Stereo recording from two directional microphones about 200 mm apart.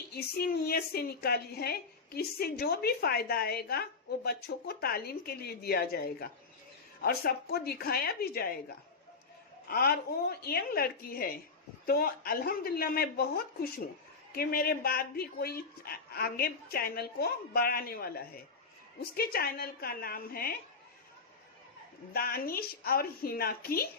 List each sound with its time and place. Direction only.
0.1 s a woman's voice: 50° left (ahead or behind)
9.6 s a woman's voice: 50° left (ahead or behind)
19.1 s a woman's voice: 50° left (ahead or behind)
22.1 s a woman's voice: 50° left (ahead or behind)